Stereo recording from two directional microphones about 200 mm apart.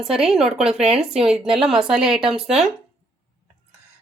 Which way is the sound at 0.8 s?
30° right (ahead or behind).